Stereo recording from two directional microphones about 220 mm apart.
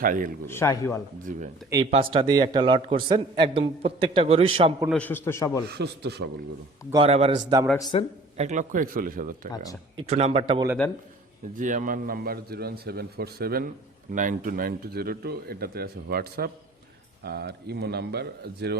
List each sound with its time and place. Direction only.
0.0 s speech: 40° right (ahead or behind)
0.4 s a man's voice: 10° left (ahead or behind)
1.3 s speech: 35° right (ahead or behind)
1.7 s a man's voice: 25° right (ahead or behind)
4.9 s a man's voice: 5° left (ahead or behind)
5.6 s speech: 50° right (ahead or behind)
6.9 s a man's voice: 25° right (ahead or behind)
7.8 s a man's voice: 20° left (ahead or behind)
8.4 s a man's voice: 35° right (ahead or behind)
11.5 s speech: 35° right (ahead or behind)